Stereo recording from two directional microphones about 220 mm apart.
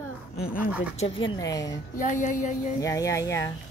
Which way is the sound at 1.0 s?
25° left (ahead or behind).